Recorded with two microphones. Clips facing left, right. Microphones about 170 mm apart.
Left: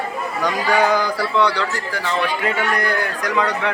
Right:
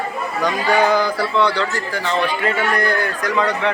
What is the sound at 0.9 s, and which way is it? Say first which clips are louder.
Speech: right 1 dB; 15° left (ahead or behind).